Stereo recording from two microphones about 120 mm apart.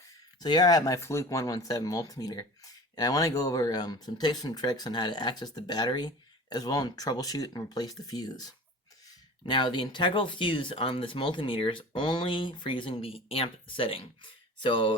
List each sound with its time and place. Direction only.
0.3 s speech: 35° left (ahead or behind)
9.5 s speech: 40° left (ahead or behind)